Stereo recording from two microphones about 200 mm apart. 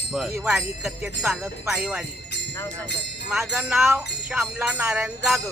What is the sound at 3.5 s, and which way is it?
Speech, 5° right (ahead or behind).